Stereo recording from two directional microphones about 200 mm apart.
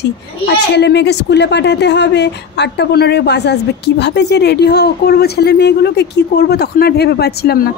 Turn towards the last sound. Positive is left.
turn(degrees=50)  # may be behind; listen again after turning